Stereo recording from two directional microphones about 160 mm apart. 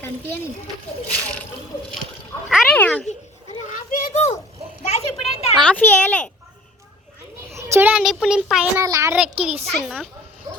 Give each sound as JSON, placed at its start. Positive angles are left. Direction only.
{"t": 2.5, "sound": "cat", "side_deg": -5}
{"t": 2.7, "sound": "speech", "side_deg": 10}
{"t": 3.7, "sound": "children playing", "side_deg": 55}
{"t": 4.9, "sound": "a sound", "side_deg": 40}
{"t": 5.5, "sound": "a child's voice", "side_deg": 10}
{"t": 7.5, "sound": "a child's voice", "side_deg": -15}
{"t": 8.8, "sound": "a child's voice", "side_deg": -20}
{"t": 9.1, "sound": "a child's voice", "side_deg": -5}